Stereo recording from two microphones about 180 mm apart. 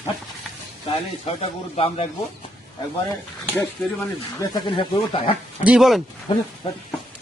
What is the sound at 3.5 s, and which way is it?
Speech, 10° left (ahead or behind).